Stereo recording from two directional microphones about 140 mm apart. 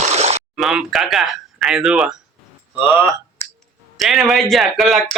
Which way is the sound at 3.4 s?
20° left (ahead or behind).